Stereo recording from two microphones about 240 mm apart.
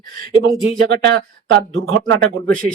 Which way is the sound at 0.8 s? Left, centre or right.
Right.